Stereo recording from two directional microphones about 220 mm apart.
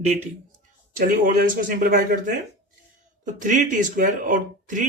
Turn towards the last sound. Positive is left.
turn(degrees=-35)  # may be behind; listen again after turning